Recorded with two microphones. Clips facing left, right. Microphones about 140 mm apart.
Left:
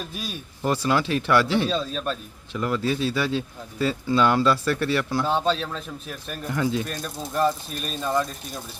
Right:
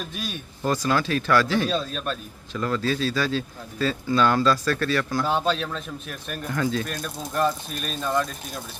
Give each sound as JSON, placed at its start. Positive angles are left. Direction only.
{"t": 0.6, "sound": "speech", "side_deg": 25}
{"t": 1.7, "sound": "speech", "side_deg": 0}
{"t": 2.5, "sound": "speech", "side_deg": 15}
{"t": 5.2, "sound": "speech", "side_deg": 0}
{"t": 6.5, "sound": "speech", "side_deg": 20}
{"t": 6.8, "sound": "speech", "side_deg": 0}